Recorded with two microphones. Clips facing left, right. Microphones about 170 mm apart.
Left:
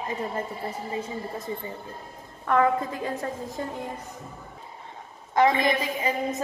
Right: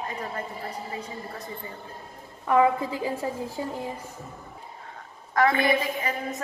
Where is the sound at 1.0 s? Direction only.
25° left (ahead or behind).